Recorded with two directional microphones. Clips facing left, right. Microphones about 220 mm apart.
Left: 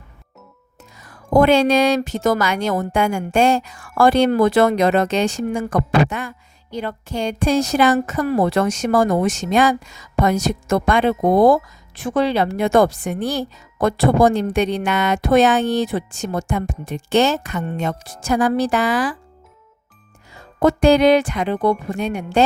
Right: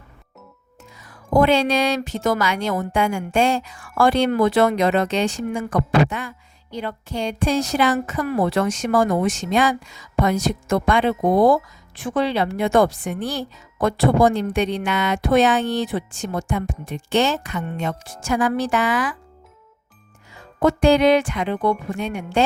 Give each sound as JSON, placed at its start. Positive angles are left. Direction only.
{"t": 0.9, "sound": "speech", "side_deg": 45}
{"t": 20.6, "sound": "a woman's voice", "side_deg": 40}